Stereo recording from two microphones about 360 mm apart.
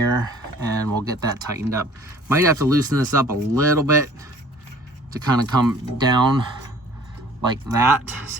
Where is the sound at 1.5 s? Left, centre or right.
Centre.